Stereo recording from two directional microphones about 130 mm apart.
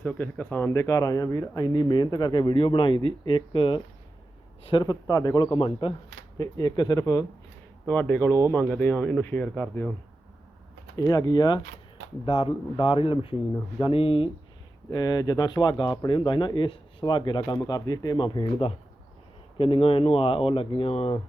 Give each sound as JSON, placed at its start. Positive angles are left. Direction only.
{"t": 0.0, "sound": "speech", "side_deg": 15}
{"t": 4.9, "sound": "a man's voice", "side_deg": 30}
{"t": 5.5, "sound": "speech", "side_deg": 40}
{"t": 6.4, "sound": "a man's voice", "side_deg": 30}
{"t": 7.9, "sound": "speech", "side_deg": 10}
{"t": 10.9, "sound": "speech", "side_deg": 25}
{"t": 14.8, "sound": "speech", "side_deg": 30}